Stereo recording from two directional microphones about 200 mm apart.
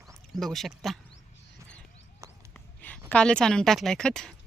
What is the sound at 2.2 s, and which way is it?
Basketball bounce, 15° right (ahead or behind).